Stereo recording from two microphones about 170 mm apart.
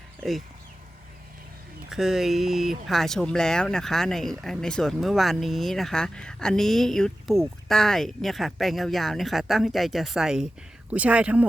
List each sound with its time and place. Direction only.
0.2 s speech: centre (ahead or behind)
1.9 s speech: centre (ahead or behind)